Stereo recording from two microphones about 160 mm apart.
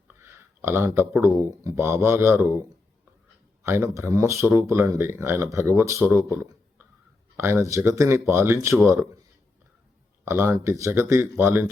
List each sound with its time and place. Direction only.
0.2 s speech: 15° right (ahead or behind)
3.6 s speech: 15° right (ahead or behind)
6.3 s a sound: 15° right (ahead or behind)
7.3 s speech: 15° right (ahead or behind)
10.2 s speech: 15° right (ahead or behind)